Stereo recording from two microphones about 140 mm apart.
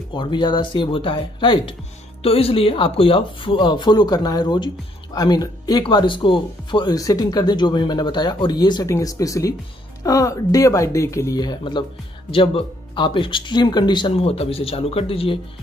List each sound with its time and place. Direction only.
0.1 s speech: 35° left (ahead or behind)